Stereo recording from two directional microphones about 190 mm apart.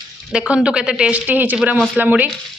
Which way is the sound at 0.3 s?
5° right (ahead or behind).